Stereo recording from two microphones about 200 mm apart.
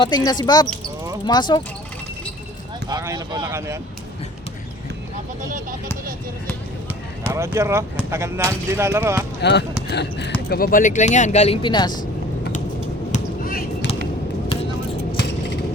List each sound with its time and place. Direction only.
0.0 s speech: 20° left (ahead or behind)
2.9 s speech: 15° right (ahead or behind)
5.4 s speech: 40° right (ahead or behind)
7.3 s speech: 15° right (ahead or behind)
9.4 s speech: 60° left (ahead or behind)
10.5 s speech: 45° left (ahead or behind); by 12.0 s 20° left (ahead or behind)
13.1 s a sound: 40° left (ahead or behind)
13.9 s a sound: 30° left (ahead or behind)